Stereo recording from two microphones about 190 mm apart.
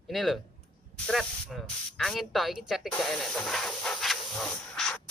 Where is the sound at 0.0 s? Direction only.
Centre (ahead or behind).